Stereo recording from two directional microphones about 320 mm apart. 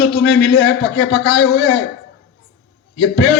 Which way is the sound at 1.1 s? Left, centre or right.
Left.